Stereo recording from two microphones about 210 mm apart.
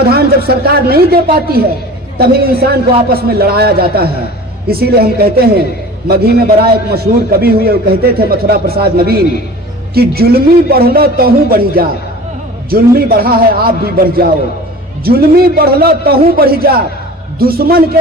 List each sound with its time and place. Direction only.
0.1 s a man's voice: 45° right (ahead or behind)